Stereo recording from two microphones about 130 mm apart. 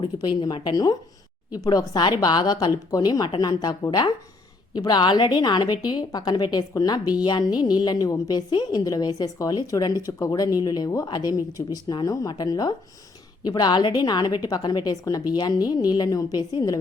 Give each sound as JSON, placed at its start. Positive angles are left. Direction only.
{"t": 0.0, "sound": "a woman's voice", "side_deg": 35}